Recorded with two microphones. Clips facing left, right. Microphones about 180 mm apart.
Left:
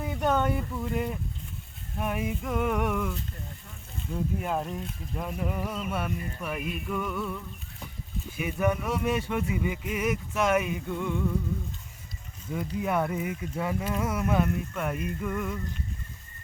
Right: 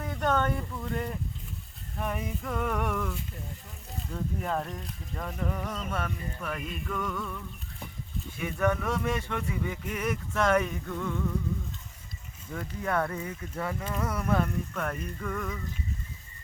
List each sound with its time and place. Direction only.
0.0 s a sound: 10° left (ahead or behind)
2.0 s speech: 5° left (ahead or behind)
12.5 s speech: 10° left (ahead or behind)